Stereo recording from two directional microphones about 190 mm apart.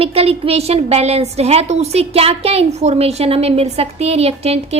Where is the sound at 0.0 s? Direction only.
30° right (ahead or behind).